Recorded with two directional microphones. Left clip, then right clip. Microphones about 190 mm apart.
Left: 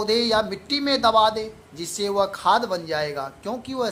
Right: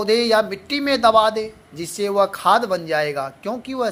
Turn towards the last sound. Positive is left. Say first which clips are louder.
# right 3 dB
turn(degrees=-10)  # may be behind; listen again after turning